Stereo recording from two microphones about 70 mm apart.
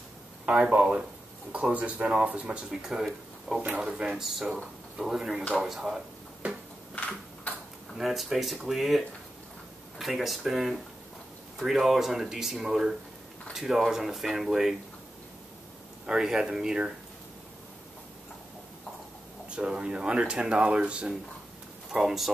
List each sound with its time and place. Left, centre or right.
0.5 s speech: centre
2.7 s speech: centre
7.0 s a sound: centre
8.0 s speech: centre
16.1 s speech: centre
19.5 s speech: centre